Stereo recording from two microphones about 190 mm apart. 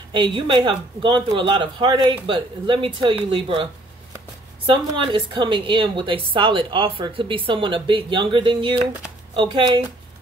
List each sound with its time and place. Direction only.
0.1 s a woman's voice: 25° right (ahead or behind)
4.6 s a woman's voice: 25° right (ahead or behind)